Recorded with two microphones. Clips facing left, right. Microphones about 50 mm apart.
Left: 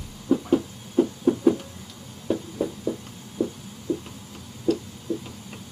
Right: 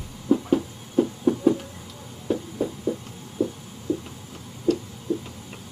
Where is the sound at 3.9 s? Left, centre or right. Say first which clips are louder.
Right 1 dB; centre.